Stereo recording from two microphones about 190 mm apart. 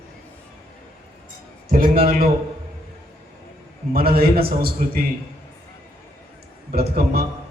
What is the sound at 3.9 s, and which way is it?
A man's voice, 50° right (ahead or behind).